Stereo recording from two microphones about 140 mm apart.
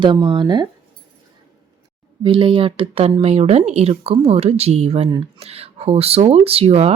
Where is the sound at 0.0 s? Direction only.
35° right (ahead or behind).